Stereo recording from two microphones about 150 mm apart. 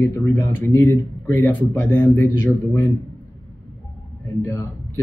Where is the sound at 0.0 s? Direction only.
20° left (ahead or behind).